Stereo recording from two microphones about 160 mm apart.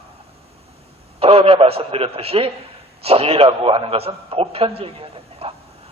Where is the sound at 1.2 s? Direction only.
35° right (ahead or behind).